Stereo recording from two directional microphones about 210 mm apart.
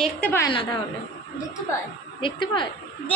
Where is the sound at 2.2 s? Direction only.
25° left (ahead or behind).